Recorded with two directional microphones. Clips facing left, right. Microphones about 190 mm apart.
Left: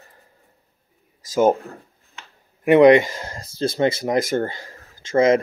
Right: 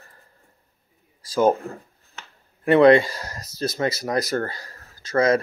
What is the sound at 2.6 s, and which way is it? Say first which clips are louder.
Speech: left 2 dB; 15° left (ahead or behind).